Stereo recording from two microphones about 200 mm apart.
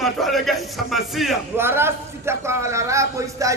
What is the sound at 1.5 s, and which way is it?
A man's voice, 10° right (ahead or behind).